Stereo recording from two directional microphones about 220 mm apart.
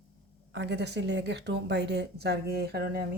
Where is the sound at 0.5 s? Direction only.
50° right (ahead or behind).